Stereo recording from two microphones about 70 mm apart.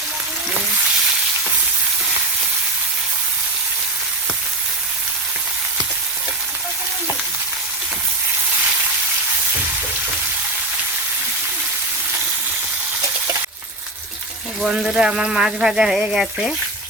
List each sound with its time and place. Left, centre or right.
14.7 s speech: centre